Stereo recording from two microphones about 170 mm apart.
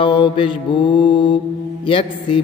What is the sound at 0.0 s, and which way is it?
A man's voice, 30° left (ahead or behind).